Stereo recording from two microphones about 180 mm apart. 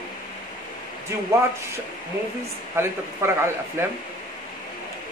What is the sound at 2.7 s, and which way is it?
Speech, 15° right (ahead or behind).